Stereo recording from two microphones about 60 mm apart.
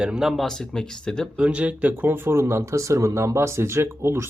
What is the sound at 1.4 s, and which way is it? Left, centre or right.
Speech, centre.